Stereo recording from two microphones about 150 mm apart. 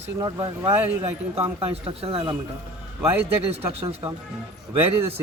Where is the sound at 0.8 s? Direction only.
15° right (ahead or behind).